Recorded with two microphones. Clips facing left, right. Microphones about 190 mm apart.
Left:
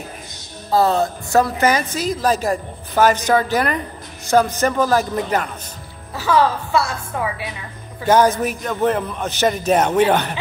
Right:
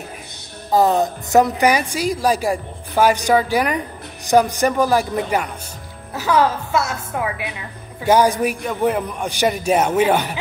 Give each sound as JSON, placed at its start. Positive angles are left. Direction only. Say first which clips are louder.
{"t": 0.7, "sound": "a woman's voice", "louder": "right 1 dB", "side_deg": -15}